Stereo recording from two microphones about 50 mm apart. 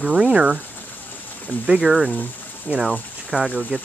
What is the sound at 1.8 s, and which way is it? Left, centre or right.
Speech, centre.